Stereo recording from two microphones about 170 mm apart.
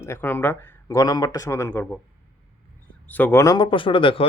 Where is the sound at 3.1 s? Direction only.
10° left (ahead or behind); by 4.3 s 30° left (ahead or behind).